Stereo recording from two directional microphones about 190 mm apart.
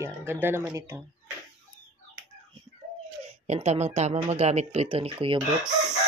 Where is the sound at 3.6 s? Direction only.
35° right (ahead or behind).